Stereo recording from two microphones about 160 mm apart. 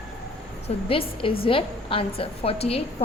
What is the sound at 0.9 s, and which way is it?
A woman's voice, 35° left (ahead or behind).